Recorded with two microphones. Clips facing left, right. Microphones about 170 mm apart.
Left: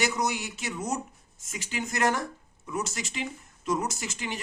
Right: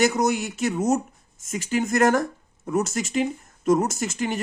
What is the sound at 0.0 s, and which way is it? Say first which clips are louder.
Speech: right 8 dB; 50° right (ahead or behind).